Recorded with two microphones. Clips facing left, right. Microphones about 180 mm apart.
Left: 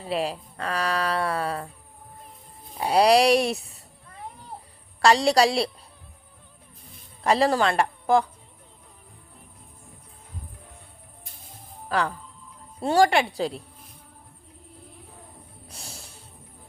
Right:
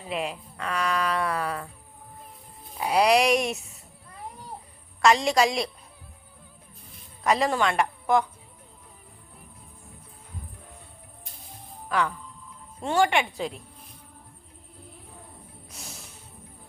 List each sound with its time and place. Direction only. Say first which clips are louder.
0.0 s speech: left 4 dB; 35° left (ahead or behind)
2.7 s speech: left 3 dB; 30° left (ahead or behind)
5.0 s speech: left 2 dB; 35° left (ahead or behind)
7.3 s a man's voice: left 3 dB; 35° left (ahead or behind)
11.9 s speech: left 1 dB; 35° left (ahead or behind)
15.7 s music: left 1 dB; 30° left (ahead or behind)